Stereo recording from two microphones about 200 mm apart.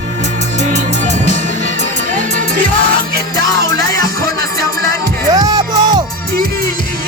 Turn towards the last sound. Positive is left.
turn(degrees=-20)  # may be behind; listen again after turning